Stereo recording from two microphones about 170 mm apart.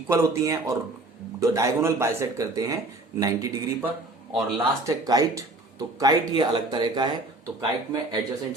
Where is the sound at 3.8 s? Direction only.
5° right (ahead or behind).